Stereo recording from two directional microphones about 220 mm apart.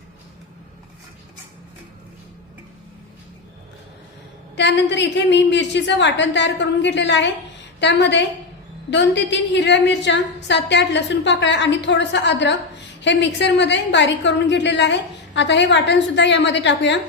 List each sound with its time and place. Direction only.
4.5 s a woman's voice: 50° left (ahead or behind)